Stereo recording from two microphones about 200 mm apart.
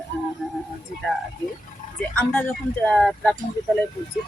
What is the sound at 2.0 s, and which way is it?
Speech, 10° left (ahead or behind).